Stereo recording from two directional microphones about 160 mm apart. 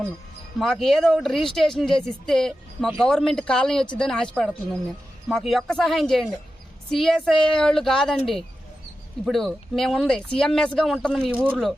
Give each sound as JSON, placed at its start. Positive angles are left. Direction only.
{"t": 0.6, "sound": "speech", "side_deg": 0}
{"t": 11.3, "sound": "speech", "side_deg": -10}